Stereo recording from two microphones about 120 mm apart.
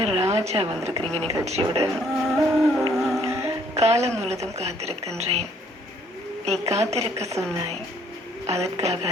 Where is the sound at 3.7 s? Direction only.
60° right (ahead or behind).